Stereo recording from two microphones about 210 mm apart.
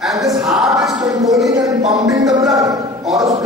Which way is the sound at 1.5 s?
15° right (ahead or behind).